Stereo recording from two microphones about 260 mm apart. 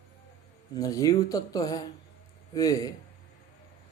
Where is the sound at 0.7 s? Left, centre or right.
Centre.